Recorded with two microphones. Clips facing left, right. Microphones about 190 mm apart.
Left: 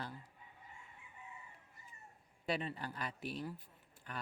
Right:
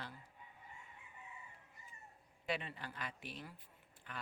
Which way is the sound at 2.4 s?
35° left (ahead or behind).